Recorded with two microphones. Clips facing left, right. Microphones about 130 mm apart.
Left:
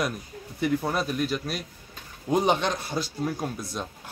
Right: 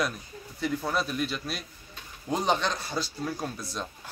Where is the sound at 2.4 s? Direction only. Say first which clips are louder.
Left 1 dB; 15° left (ahead or behind).